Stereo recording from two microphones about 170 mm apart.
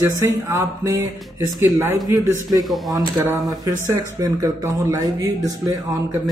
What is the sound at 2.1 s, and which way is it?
Speech, 20° right (ahead or behind).